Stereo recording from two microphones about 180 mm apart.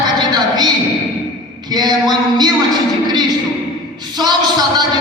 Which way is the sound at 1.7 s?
25° right (ahead or behind).